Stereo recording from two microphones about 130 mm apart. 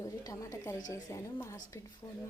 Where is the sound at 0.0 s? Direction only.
25° left (ahead or behind).